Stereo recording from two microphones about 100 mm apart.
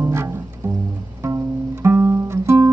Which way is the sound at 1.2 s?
30° right (ahead or behind).